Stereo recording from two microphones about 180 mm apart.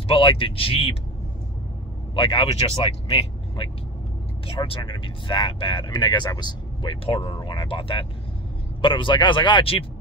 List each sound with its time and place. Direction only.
0.1 s speech: 30° left (ahead or behind)
2.1 s speech: 30° left (ahead or behind)